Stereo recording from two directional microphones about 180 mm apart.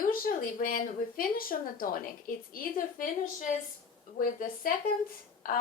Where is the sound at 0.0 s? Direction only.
50° left (ahead or behind).